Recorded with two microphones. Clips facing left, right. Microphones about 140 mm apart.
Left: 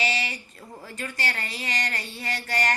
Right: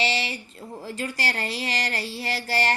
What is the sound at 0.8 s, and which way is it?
Speech, 30° right (ahead or behind).